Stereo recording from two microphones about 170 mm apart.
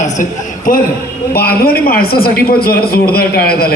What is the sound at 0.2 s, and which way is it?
Speech, 50° left (ahead or behind).